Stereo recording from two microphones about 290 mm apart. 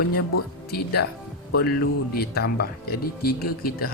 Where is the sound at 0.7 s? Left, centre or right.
Left.